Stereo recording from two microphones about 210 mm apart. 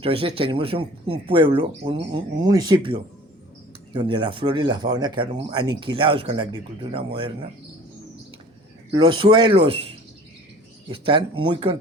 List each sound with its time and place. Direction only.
0.0 s speech: 25° right (ahead or behind)
8.9 s speech: 25° right (ahead or behind)